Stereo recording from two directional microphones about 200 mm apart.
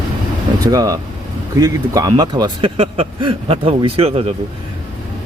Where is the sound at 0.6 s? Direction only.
20° right (ahead or behind).